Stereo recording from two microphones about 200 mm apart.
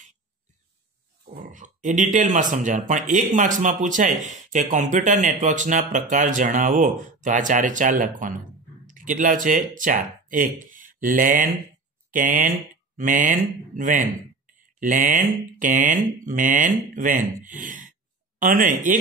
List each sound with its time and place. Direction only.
1.3 s speech: 40° right (ahead or behind)